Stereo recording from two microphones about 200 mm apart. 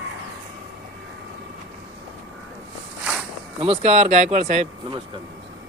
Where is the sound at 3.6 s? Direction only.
30° right (ahead or behind).